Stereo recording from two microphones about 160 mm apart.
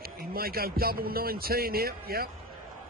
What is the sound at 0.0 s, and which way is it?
A man's voice, 70° right (ahead or behind).